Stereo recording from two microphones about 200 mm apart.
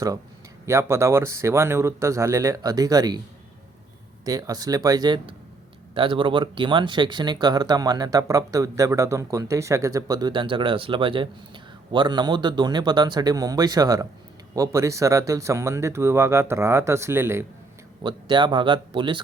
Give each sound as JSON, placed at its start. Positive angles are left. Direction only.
{"t": 0.6, "sound": "speech", "side_deg": -15}
{"t": 4.3, "sound": "speech", "side_deg": -20}
{"t": 18.0, "sound": "speech", "side_deg": -25}